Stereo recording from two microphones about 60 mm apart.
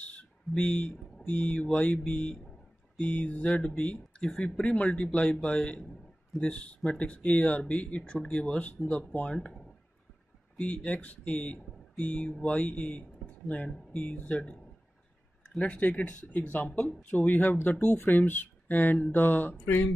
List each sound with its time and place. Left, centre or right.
0.0 s a sound: left
1.2 s speech: left
3.0 s speech: left
8.7 s speech: centre
10.6 s speech: centre
17.9 s speech: left